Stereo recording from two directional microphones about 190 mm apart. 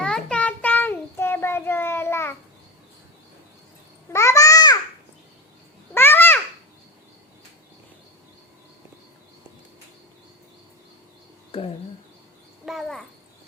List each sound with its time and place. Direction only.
0.0 s child singing: 5° left (ahead or behind)
4.1 s babbling: 15° left (ahead or behind)
5.9 s babbling: 10° left (ahead or behind)
11.5 s speech: 30° left (ahead or behind)
12.6 s a sound: centre (ahead or behind)